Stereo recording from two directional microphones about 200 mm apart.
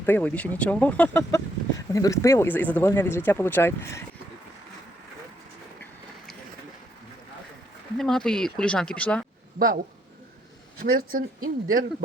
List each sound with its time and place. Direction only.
0.0 s speech: 10° left (ahead or behind)
7.9 s speech: 5° left (ahead or behind)
9.6 s speech: 45° right (ahead or behind)